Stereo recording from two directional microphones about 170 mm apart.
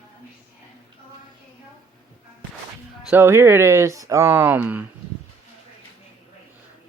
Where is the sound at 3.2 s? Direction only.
15° right (ahead or behind).